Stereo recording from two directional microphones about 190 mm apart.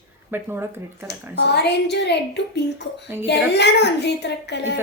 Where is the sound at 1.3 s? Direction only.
60° left (ahead or behind).